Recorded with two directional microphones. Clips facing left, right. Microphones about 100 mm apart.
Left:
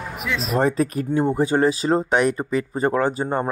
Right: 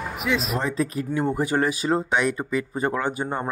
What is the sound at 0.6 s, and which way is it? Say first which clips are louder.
Speech: left 5 dB; 60° left (ahead or behind).